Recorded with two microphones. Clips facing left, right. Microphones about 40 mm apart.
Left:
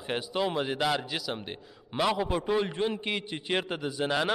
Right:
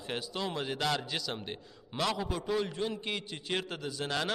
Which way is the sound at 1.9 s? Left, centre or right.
Left.